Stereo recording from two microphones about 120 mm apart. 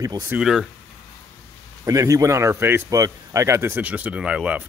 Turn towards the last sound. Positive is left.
turn(degrees=-10)  # may be behind; listen again after turning